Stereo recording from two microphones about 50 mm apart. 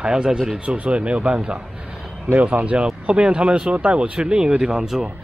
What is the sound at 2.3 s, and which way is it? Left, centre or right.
Speech, right.